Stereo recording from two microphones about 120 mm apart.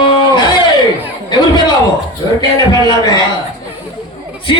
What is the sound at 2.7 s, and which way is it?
Speech, 35° left (ahead or behind).